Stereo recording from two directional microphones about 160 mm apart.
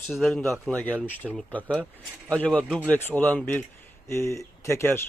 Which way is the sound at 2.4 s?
5° left (ahead or behind).